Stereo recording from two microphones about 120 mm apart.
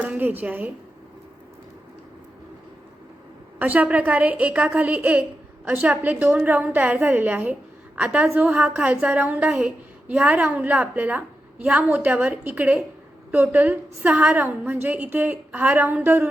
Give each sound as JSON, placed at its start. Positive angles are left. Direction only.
{"t": 0.0, "sound": "a woman's voice", "side_deg": -15}
{"t": 3.6, "sound": "a woman's voice", "side_deg": -15}